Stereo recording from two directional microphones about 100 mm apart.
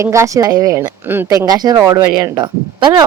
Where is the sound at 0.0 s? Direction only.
30° right (ahead or behind).